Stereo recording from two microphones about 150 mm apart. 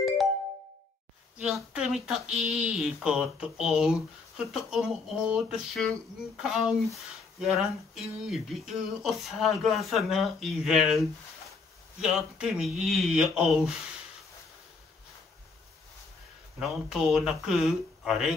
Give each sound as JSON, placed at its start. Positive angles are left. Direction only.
{"t": 1.4, "sound": "speech", "side_deg": 0}
{"t": 16.5, "sound": "speech", "side_deg": 0}